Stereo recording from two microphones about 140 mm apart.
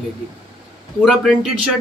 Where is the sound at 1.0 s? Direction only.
Centre (ahead or behind).